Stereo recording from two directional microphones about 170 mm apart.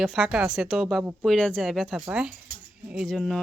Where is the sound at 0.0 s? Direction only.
Centre (ahead or behind).